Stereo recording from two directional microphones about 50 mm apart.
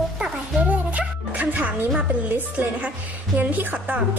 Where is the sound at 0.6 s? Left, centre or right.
Right.